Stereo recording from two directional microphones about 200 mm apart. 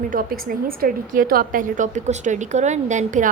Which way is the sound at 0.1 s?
45° right (ahead or behind).